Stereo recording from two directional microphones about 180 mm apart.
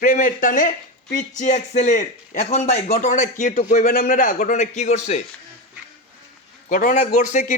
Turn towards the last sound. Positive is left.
turn(degrees=45)  # may be behind; listen again after turning